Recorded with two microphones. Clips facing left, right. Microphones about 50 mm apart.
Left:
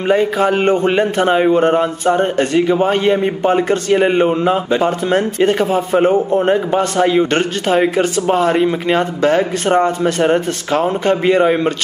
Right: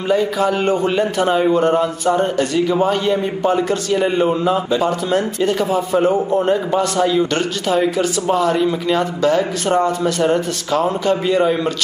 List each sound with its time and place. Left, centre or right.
0.1 s a man's voice: left